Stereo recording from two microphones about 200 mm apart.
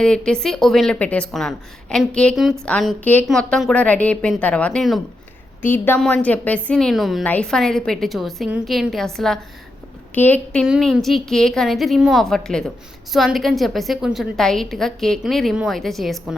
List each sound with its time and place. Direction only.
0.0 s a woman's voice: 5° left (ahead or behind)